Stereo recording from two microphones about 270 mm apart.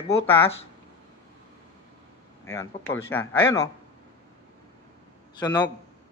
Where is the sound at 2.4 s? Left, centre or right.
Centre.